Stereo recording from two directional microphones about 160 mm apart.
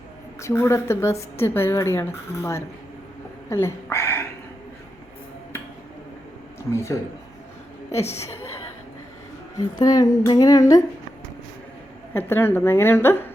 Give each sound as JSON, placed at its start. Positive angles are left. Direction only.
{"t": 0.3, "sound": "a woman's voice", "side_deg": 20}
{"t": 6.6, "sound": "speech", "side_deg": 15}
{"t": 8.2, "sound": "a woman's voice", "side_deg": 15}
{"t": 9.6, "sound": "speech", "side_deg": 20}
{"t": 12.1, "sound": "a woman's voice", "side_deg": 15}